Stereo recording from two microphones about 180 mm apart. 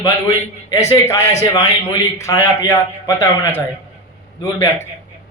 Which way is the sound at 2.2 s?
15° left (ahead or behind).